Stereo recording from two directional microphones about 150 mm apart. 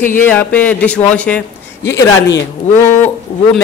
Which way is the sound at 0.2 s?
10° left (ahead or behind).